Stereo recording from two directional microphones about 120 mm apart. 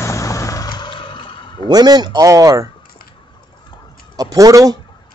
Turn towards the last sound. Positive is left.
turn(degrees=-30)  # may be behind; listen again after turning